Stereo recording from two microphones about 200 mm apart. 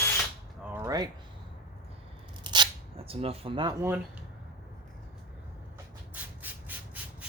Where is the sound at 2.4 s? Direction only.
20° right (ahead or behind).